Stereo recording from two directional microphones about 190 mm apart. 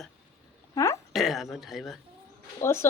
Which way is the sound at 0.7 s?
15° left (ahead or behind).